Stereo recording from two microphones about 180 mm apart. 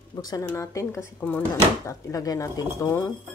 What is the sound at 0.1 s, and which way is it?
Speech, 20° left (ahead or behind).